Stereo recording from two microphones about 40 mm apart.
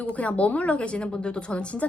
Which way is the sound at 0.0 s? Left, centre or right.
Left.